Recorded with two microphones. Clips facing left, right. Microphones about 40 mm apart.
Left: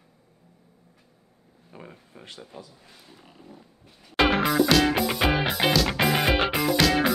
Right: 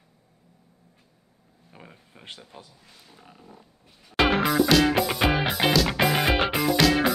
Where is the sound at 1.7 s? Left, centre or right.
Centre.